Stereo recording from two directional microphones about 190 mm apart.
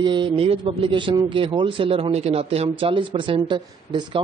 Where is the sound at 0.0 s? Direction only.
25° right (ahead or behind).